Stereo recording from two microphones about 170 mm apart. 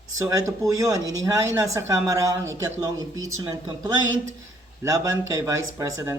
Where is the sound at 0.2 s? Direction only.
20° right (ahead or behind).